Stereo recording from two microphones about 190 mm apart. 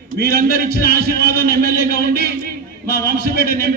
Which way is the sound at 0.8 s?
55° left (ahead or behind).